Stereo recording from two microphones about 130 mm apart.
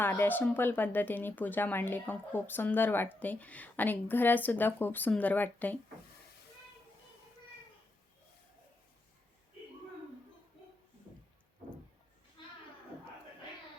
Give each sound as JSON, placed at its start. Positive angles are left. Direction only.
{"t": 0.0, "sound": "speech", "side_deg": 15}
{"t": 12.4, "sound": "children playing", "side_deg": 35}